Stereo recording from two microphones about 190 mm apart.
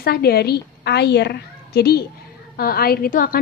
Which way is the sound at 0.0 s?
55° left (ahead or behind).